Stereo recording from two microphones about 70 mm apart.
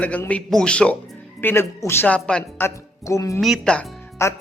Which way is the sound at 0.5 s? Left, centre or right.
Centre.